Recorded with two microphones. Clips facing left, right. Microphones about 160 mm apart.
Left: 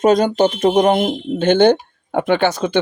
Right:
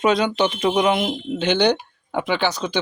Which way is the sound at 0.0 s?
45° left (ahead or behind).